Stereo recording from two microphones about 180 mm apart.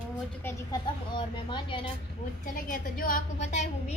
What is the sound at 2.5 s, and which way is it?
Speech, 50° left (ahead or behind).